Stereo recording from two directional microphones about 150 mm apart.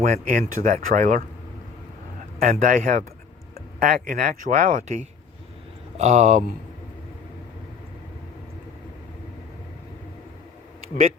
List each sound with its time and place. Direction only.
0.0 s speech: 60° right (ahead or behind)
2.4 s speech: 60° right (ahead or behind)